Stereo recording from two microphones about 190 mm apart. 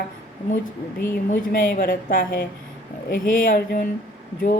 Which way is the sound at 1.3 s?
50° left (ahead or behind).